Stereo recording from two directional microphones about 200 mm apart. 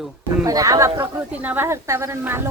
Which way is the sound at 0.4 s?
15° right (ahead or behind).